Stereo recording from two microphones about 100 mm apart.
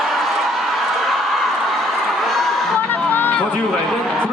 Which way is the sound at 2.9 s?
20° left (ahead or behind).